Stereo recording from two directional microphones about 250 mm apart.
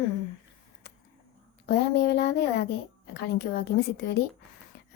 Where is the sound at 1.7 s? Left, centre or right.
Left.